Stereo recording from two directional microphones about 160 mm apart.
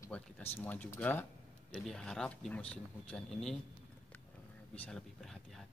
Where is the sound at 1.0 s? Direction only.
10° left (ahead or behind).